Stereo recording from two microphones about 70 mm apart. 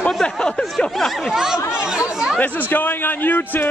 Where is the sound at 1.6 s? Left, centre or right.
Left.